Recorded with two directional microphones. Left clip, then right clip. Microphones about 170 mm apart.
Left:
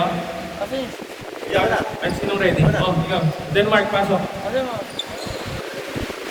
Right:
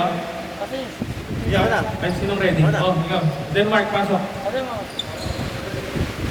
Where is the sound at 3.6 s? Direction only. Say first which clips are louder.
Left 1 dB; 30° left (ahead or behind).